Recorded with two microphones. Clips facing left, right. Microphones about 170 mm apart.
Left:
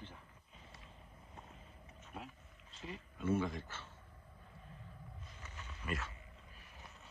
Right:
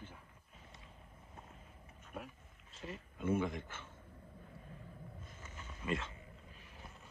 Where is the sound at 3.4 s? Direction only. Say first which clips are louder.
Right 1 dB; 20° right (ahead or behind).